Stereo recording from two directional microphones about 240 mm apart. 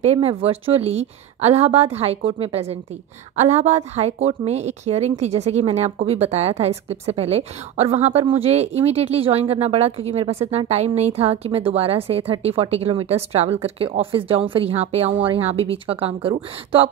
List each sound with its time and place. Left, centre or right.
0.0 s a woman's voice: right